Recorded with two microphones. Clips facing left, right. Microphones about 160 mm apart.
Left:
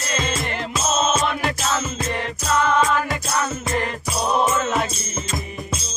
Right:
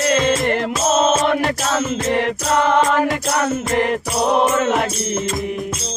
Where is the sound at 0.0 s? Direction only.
60° right (ahead or behind).